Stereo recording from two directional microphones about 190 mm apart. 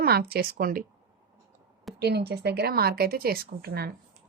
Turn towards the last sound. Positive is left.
turn(degrees=-55)  # may be behind; listen again after turning